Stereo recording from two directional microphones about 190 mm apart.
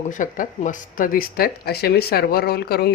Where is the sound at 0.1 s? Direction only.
40° left (ahead or behind).